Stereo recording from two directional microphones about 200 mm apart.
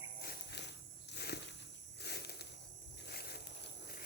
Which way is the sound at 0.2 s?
55° left (ahead or behind).